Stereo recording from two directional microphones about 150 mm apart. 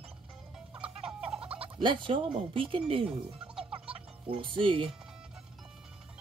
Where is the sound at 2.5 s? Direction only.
35° right (ahead or behind).